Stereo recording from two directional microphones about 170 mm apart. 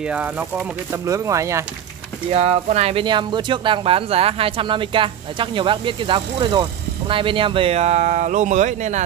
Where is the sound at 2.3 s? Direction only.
40° right (ahead or behind).